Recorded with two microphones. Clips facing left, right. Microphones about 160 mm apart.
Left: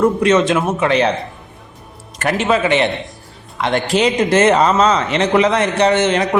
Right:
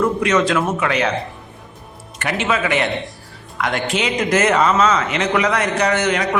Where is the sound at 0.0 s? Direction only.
30° left (ahead or behind).